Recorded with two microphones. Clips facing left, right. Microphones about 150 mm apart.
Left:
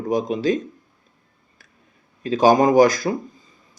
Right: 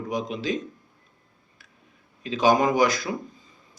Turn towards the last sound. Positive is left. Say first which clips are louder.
# left 7 dB
turn(degrees=40)  # may be behind; listen again after turning